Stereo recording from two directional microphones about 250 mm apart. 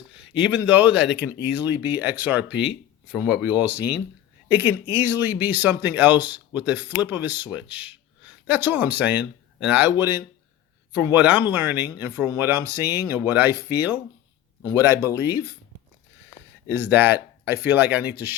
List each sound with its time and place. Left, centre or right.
0.3 s speech: centre
1.0 s speech: left
1.3 s speech: centre
16.7 s speech: centre